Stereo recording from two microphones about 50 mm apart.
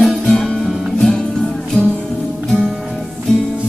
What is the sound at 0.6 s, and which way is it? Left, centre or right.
Music, centre.